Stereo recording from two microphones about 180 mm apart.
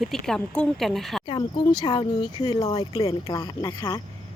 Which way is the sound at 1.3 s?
25° left (ahead or behind).